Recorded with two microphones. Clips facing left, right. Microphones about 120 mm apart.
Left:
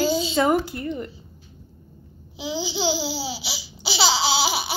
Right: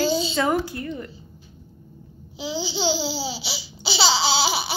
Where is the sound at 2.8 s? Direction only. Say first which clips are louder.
Right 1 dB; 5° left (ahead or behind).